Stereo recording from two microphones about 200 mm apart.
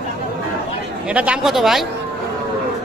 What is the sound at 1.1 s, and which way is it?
Speech, 5° right (ahead or behind).